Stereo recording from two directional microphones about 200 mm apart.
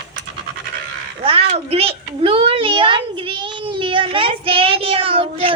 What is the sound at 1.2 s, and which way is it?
A child's voice, 30° right (ahead or behind).